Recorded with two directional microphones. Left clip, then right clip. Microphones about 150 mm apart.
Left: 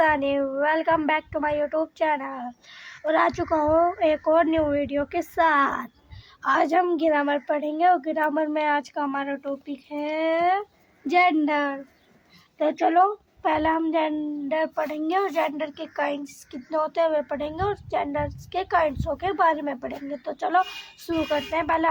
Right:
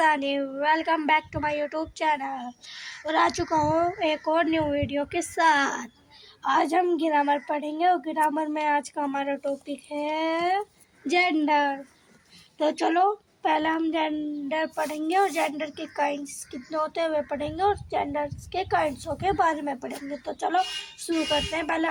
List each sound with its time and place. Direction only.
0.0 s speech: 30° left (ahead or behind)
12.5 s speech: 15° left (ahead or behind); by 21.6 s 30° left (ahead or behind)
21.6 s speech: 20° left (ahead or behind)